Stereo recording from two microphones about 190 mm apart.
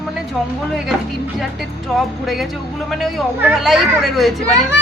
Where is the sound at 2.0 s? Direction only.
Centre (ahead or behind).